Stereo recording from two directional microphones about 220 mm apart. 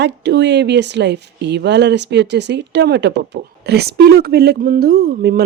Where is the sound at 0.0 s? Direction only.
50° right (ahead or behind).